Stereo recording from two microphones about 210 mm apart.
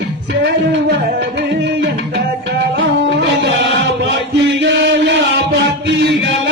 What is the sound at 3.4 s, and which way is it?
Music, 55° right (ahead or behind).